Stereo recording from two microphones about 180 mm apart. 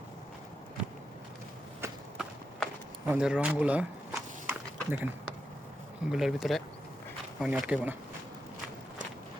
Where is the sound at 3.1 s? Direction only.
5° right (ahead or behind).